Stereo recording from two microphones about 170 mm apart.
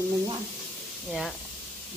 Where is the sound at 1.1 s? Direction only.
Centre (ahead or behind).